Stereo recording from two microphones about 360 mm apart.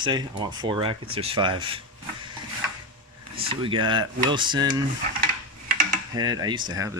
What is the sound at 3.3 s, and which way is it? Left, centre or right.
Speech, centre.